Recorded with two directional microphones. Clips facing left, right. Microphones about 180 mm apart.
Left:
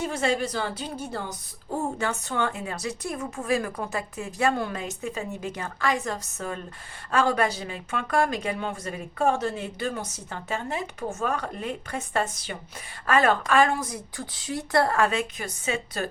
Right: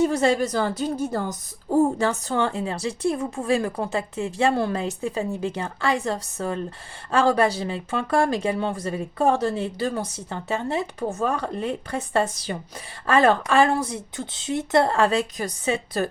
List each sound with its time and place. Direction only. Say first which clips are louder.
0.0 s a woman's voice: right 6 dB; 35° right (ahead or behind)